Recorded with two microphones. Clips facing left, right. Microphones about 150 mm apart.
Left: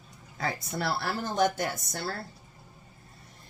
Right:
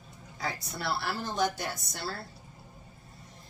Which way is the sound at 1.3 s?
50° left (ahead or behind).